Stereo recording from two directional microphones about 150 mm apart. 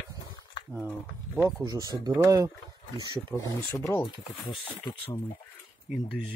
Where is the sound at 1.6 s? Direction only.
25° right (ahead or behind).